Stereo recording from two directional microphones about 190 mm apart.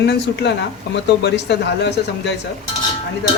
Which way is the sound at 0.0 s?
65° left (ahead or behind).